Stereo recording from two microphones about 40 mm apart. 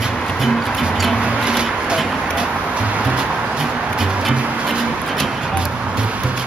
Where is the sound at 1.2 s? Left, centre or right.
Right.